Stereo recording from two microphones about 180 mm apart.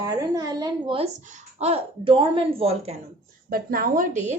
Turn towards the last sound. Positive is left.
turn(degrees=-45)  # may be behind; listen again after turning